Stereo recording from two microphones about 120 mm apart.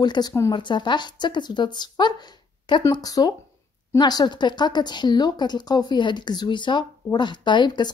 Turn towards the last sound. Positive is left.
turn(degrees=40)  # may be behind; listen again after turning